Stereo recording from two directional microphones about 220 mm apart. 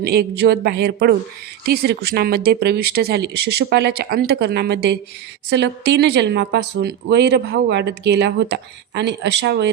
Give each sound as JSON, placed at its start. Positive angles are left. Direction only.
{"t": 0.0, "sound": "speech", "side_deg": -45}